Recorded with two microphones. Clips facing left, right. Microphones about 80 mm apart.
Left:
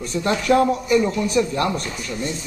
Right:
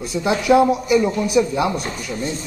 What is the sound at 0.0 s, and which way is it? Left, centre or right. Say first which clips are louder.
A man's voice: right 2 dB; centre.